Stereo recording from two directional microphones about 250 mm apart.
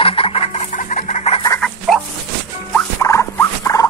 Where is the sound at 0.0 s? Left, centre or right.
Left.